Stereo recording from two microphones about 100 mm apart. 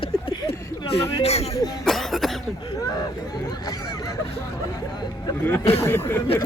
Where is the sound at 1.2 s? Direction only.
90° left.